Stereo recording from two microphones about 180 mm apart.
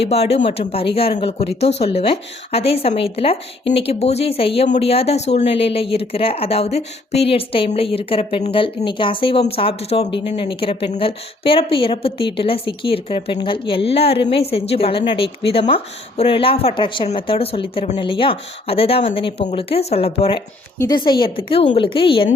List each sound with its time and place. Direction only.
0.0 s speech: 35° left (ahead or behind)
20.7 s a woman's voice: 20° left (ahead or behind)